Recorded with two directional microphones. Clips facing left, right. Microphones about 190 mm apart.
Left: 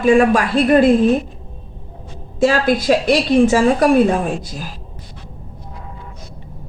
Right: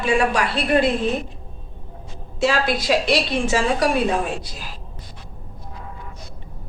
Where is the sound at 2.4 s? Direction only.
50° left (ahead or behind).